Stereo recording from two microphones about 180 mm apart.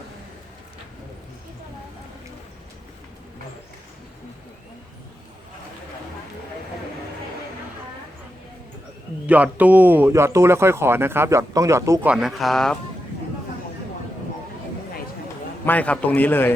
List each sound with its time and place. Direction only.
9.2 s a man's voice: 10° right (ahead or behind)
12.1 s speech: centre (ahead or behind)
15.6 s a man's voice: 10° left (ahead or behind)